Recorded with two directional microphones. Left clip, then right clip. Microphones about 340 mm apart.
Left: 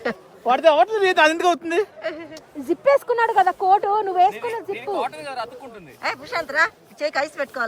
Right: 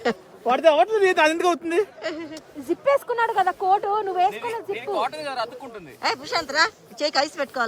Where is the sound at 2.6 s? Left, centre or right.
Left.